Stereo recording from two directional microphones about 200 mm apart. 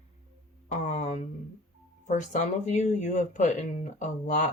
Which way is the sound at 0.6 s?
40° left (ahead or behind).